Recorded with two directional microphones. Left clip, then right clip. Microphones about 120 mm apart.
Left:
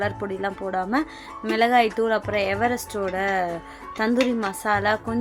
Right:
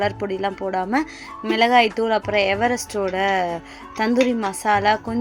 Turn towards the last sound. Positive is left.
turn(degrees=-25)  # may be behind; listen again after turning